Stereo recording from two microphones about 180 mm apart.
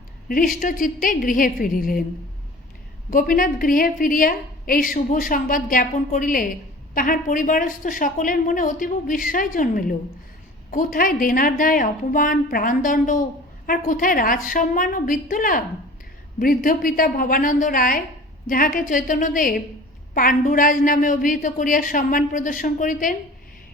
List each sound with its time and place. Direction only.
0.3 s a woman's voice: 50° left (ahead or behind)
3.1 s a woman's voice: 50° left (ahead or behind)